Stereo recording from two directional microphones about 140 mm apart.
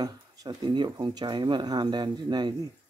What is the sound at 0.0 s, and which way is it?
Speech, 25° right (ahead or behind).